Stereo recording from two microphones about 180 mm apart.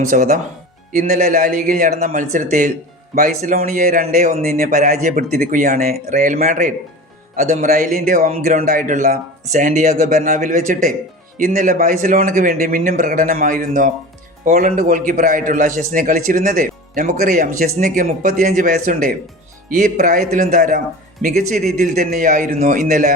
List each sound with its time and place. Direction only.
0.0 s a man's voice: 55° right (ahead or behind)